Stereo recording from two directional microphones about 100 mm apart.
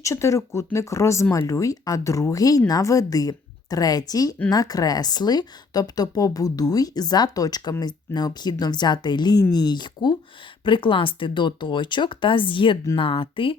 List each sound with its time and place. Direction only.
0.0 s a woman's voice: 30° left (ahead or behind); by 13.6 s 60° left (ahead or behind)